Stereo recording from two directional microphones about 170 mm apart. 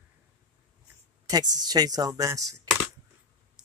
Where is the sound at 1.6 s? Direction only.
25° right (ahead or behind).